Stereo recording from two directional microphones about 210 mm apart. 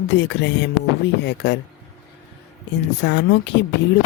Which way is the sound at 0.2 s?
55° left (ahead or behind).